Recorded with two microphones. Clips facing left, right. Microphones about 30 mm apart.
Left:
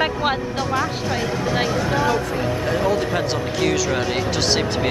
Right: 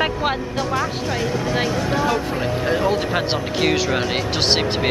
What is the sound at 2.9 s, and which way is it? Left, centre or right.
Speech, right.